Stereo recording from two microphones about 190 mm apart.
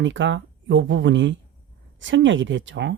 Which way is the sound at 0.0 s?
80° right.